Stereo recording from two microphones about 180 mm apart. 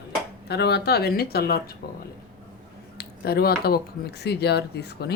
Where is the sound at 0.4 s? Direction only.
65° left (ahead or behind).